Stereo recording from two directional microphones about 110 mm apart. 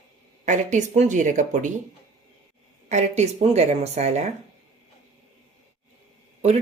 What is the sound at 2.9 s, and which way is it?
Speech, 90° right.